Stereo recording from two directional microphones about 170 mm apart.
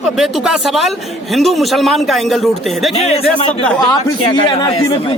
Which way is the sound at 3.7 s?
25° left (ahead or behind).